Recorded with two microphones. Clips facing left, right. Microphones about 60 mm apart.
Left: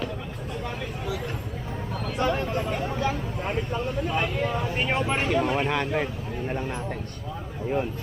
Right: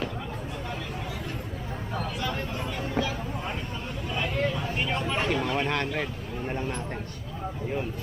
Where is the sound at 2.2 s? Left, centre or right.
Left.